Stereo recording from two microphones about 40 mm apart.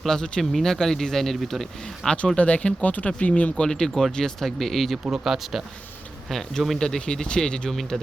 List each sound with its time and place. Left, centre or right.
0.0 s speech: centre
2.0 s speech: left
3.7 s speech: centre
5.2 s speech: centre
6.7 s speech: centre